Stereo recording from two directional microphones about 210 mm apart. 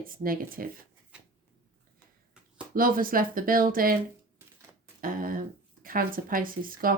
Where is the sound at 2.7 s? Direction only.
45° right (ahead or behind).